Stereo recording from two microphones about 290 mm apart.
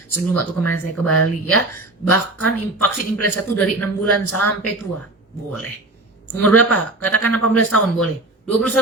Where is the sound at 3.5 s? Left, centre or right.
Centre.